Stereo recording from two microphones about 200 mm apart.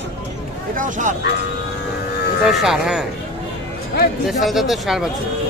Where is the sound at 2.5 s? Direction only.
Centre (ahead or behind).